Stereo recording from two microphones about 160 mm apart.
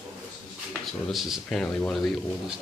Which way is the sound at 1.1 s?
Centre (ahead or behind).